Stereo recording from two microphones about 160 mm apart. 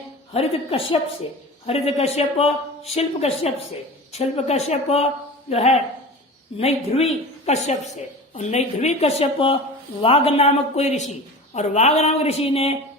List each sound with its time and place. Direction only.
0.3 s a woman's voice: 35° left (ahead or behind)